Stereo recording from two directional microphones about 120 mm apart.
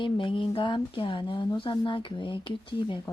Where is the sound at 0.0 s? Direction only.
45° left (ahead or behind).